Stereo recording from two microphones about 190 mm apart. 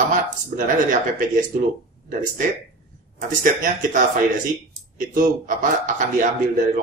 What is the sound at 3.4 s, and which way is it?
Speech, 45° right (ahead or behind).